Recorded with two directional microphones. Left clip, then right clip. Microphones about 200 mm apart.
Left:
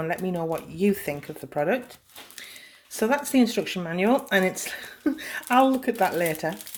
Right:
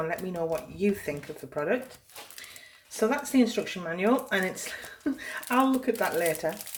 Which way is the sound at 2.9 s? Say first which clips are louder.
Left 3 dB; 50° left (ahead or behind).